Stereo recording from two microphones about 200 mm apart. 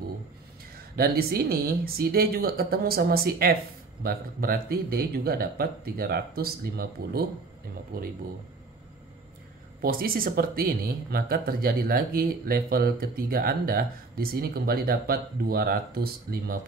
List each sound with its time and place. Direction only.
0.9 s speech: 50° right (ahead or behind)
9.8 s speech: 45° right (ahead or behind)